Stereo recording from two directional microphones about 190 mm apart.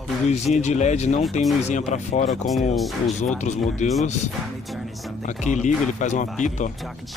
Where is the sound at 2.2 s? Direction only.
Centre (ahead or behind).